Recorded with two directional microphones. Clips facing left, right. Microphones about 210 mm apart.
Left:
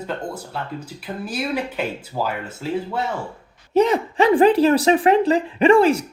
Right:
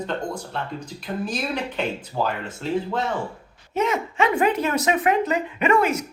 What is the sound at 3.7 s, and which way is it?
Speech, 35° left (ahead or behind).